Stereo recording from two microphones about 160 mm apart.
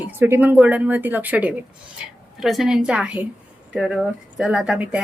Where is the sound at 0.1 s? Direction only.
15° right (ahead or behind).